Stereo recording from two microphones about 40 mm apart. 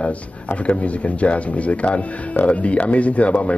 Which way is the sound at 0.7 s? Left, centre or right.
Left.